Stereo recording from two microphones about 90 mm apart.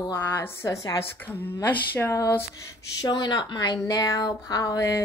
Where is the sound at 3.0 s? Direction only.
55° left (ahead or behind).